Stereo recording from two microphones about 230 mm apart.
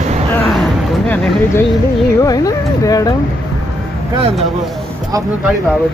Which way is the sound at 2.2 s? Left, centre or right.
Centre.